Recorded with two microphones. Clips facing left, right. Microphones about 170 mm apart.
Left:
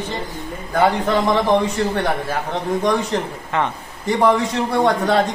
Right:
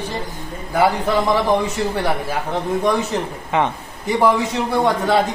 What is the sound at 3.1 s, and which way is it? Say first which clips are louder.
A man's voice: right 1 dB; 10° right (ahead or behind).